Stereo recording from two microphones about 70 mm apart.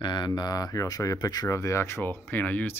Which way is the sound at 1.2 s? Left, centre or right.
Left.